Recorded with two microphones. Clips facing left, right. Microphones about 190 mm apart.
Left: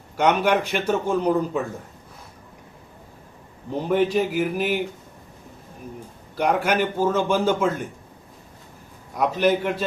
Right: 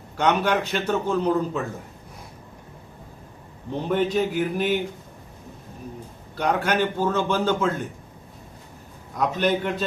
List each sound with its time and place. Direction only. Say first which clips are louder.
0.2 s a man's voice: left 2 dB; 10° left (ahead or behind)
3.8 s a man's voice: left 2 dB; 10° left (ahead or behind)
6.3 s a man's voice: left 2 dB; 10° left (ahead or behind)
9.1 s a man's voice: left 2 dB; 10° left (ahead or behind)